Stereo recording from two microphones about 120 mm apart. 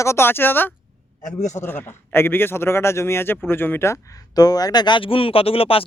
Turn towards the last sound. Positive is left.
turn(degrees=50)  # may be behind; listen again after turning